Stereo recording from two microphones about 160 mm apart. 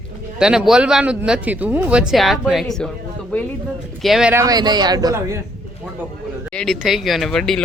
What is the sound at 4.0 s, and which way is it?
Speech, centre (ahead or behind).